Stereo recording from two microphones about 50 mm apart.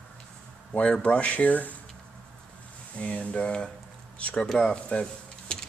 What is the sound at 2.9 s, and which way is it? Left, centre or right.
Speech, left.